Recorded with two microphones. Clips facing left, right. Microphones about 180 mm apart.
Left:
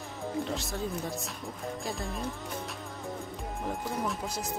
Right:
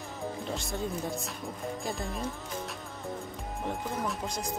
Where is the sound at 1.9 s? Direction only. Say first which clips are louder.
Right 1 dB; centre (ahead or behind).